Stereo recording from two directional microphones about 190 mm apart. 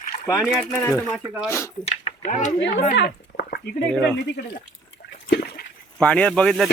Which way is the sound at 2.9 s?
55° left (ahead or behind).